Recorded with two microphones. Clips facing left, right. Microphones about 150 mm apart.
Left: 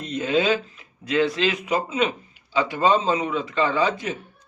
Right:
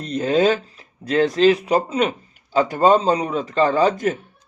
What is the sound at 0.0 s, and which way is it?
Speech, 35° right (ahead or behind).